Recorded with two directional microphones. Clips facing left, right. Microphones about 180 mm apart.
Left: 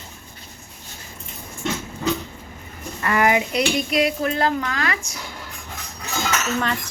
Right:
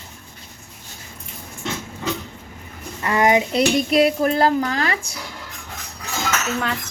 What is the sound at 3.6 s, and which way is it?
Speech, 35° right (ahead or behind).